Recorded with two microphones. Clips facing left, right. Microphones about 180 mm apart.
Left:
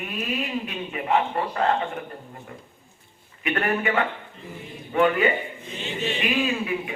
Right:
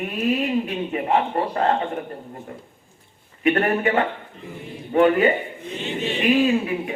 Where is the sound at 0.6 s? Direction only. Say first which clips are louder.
Right 4 dB; 40° right (ahead or behind).